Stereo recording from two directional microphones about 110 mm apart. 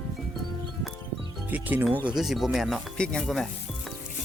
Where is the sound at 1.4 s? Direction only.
15° right (ahead or behind).